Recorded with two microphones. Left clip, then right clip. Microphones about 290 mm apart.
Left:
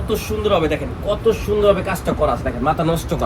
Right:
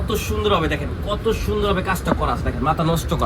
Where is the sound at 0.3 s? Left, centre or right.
Centre.